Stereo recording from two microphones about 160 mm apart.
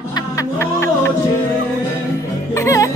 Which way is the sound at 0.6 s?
15° left (ahead or behind).